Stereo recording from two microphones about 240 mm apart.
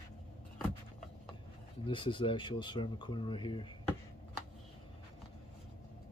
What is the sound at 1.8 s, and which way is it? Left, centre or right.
Speech, left.